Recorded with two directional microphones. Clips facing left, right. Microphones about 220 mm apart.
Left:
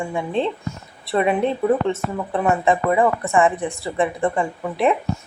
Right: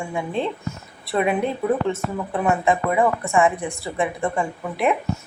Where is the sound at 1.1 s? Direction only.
Centre (ahead or behind).